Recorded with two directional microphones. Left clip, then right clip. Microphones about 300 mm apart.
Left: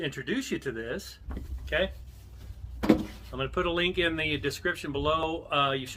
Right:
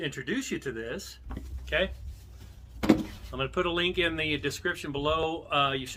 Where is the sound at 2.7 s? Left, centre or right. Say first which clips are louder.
Even; centre.